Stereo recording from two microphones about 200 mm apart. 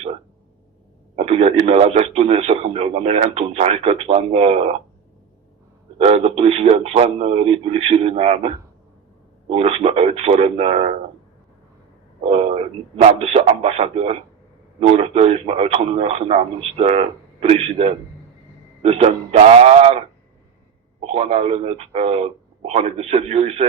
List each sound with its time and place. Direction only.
1.1 s speech: 30° right (ahead or behind)
6.0 s speech: 30° right (ahead or behind)
13.0 s speech: 30° right (ahead or behind)
21.1 s speech: 30° right (ahead or behind)